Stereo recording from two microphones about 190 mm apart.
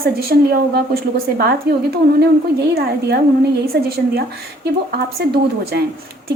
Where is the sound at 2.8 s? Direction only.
55° right (ahead or behind).